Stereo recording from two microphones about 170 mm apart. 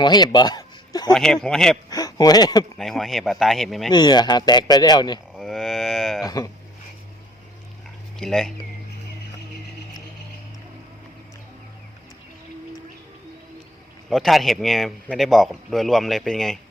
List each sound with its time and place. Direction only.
0.0 s a sound: 25° left (ahead or behind)
1.1 s a man's voice: 5° left (ahead or behind)
1.9 s speech: 20° left (ahead or behind)
2.7 s a man's voice: centre (ahead or behind)
3.9 s speech: 25° left (ahead or behind)
5.4 s a sound: centre (ahead or behind)
6.2 s speech: 20° left (ahead or behind)
8.2 s a man's voice: 5° left (ahead or behind)
14.1 s a man's voice: centre (ahead or behind)